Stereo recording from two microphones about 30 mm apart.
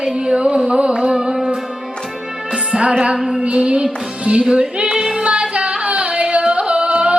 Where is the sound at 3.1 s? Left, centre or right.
Centre.